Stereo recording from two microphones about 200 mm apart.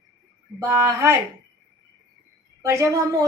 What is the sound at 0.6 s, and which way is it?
Speech, 15° right (ahead or behind).